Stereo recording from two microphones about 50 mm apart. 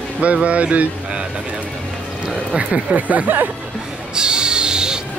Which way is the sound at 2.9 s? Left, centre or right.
Right.